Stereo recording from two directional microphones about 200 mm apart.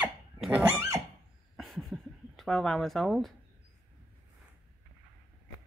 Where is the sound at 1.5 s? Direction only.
Centre (ahead or behind).